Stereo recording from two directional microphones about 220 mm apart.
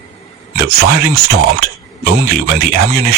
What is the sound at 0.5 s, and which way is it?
Speech, 45° right (ahead or behind).